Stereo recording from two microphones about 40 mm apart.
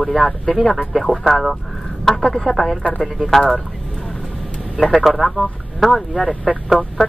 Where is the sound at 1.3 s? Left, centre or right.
Centre.